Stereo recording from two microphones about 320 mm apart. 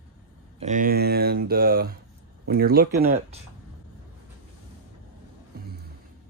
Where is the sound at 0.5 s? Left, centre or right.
Right.